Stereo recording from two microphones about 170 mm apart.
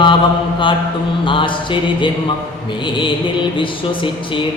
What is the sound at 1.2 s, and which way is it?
Speech, 30° left (ahead or behind).